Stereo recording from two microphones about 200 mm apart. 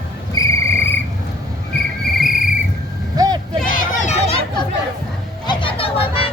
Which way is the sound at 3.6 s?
45° left (ahead or behind).